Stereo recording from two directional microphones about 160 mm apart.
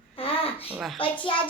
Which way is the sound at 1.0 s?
30° left (ahead or behind).